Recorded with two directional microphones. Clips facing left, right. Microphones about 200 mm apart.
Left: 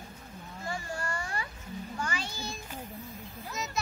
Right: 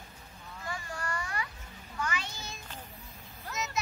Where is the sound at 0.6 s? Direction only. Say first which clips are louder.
Left 2 dB; 25° left (ahead or behind).